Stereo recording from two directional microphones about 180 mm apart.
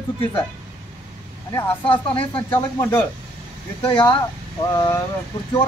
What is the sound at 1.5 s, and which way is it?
Speech, 30° left (ahead or behind).